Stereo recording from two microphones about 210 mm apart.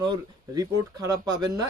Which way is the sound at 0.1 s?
20° right (ahead or behind).